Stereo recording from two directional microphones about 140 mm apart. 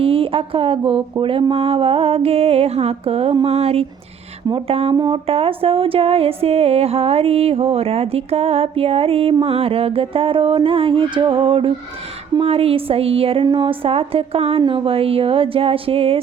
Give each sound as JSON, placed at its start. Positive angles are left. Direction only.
{"t": 0.0, "sound": "a woman's voice", "side_deg": -40}
{"t": 1.2, "sound": "music", "side_deg": -40}